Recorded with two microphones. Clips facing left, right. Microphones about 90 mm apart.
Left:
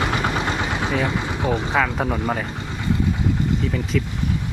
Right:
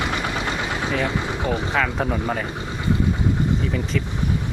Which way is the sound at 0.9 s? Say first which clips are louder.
Left 1 dB; 5° left (ahead or behind).